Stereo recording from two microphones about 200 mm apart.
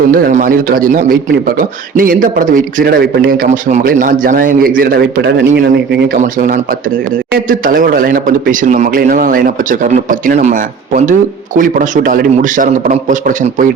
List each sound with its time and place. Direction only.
0.1 s a man's voice: 40° right (ahead or behind)
6.1 s a man's voice: 40° right (ahead or behind)